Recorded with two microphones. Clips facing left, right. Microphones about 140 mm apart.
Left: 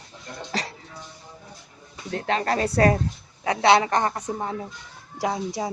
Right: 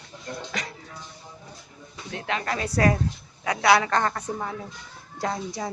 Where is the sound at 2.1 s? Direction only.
40° left (ahead or behind).